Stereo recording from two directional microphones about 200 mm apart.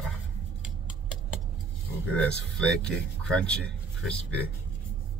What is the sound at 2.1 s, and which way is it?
Speech, 5° left (ahead or behind).